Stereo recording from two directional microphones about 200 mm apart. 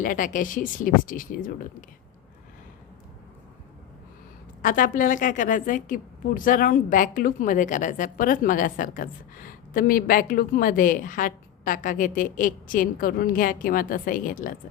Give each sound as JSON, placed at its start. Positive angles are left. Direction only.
{"t": 0.0, "sound": "speech", "side_deg": 40}
{"t": 4.6, "sound": "a woman's voice", "side_deg": 40}